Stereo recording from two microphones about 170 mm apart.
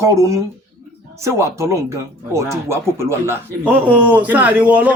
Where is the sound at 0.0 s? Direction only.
20° right (ahead or behind).